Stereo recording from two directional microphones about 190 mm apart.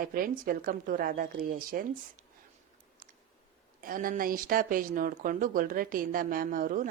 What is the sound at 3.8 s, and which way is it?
A woman's voice, 45° right (ahead or behind).